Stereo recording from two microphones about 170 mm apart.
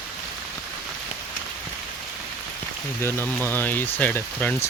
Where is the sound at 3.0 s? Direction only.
10° left (ahead or behind).